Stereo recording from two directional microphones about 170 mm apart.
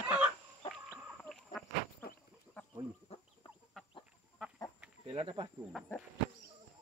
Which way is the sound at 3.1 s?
40° left (ahead or behind).